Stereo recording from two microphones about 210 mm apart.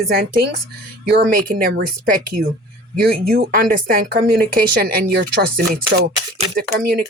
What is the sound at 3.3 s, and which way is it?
Speech, 45° right (ahead or behind).